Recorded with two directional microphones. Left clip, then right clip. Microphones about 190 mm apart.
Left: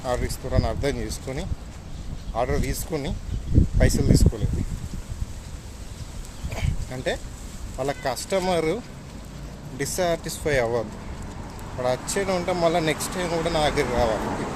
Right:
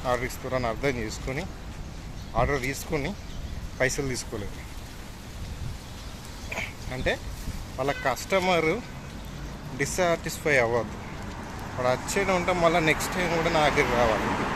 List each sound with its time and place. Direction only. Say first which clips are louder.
0.0 s speech: even; 15° left (ahead or behind)
6.5 s a sound: right 2 dB; 15° left (ahead or behind)
7.8 s speech: even; 15° left (ahead or behind)